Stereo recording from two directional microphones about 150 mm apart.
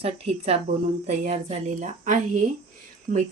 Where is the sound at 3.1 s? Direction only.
75° right (ahead or behind).